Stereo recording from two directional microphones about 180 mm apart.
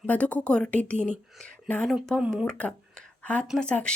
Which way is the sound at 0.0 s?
10° left (ahead or behind).